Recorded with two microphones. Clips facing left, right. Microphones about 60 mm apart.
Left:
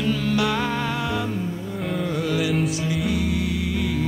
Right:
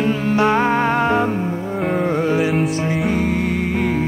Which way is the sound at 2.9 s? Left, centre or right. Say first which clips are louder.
Right 5 dB; right.